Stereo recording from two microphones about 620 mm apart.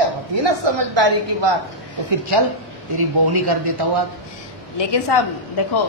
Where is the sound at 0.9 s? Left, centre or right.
Right.